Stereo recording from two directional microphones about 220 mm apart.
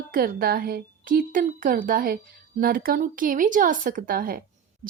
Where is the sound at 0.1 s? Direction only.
40° right (ahead or behind).